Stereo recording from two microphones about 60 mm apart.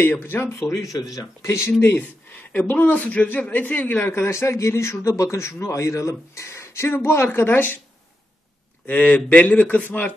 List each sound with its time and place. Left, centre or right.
0.0 s a man's voice: left
1.7 s a man's voice: left
8.8 s a man's voice: left